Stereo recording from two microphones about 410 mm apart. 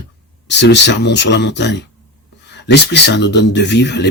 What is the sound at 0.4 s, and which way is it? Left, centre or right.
Speech, left.